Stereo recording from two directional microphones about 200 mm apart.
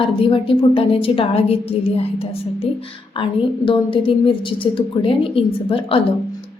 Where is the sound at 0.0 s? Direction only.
25° left (ahead or behind).